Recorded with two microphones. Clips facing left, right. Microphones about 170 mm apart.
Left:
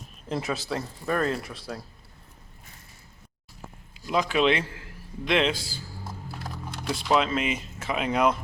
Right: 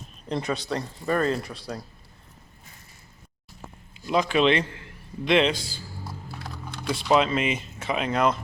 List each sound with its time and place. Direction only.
0.3 s speech: centre (ahead or behind)
4.0 s speech: 5° left (ahead or behind)
6.8 s speech: centre (ahead or behind)